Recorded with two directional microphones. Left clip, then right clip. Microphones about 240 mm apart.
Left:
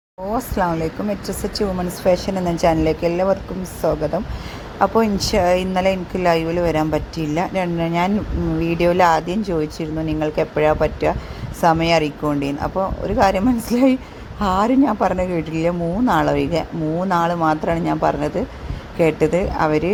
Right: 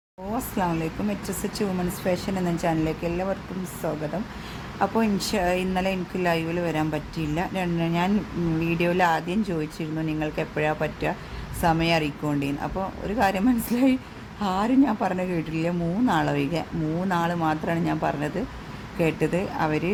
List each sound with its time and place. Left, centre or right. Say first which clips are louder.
0.3 s a woman's voice: left 6 dB; centre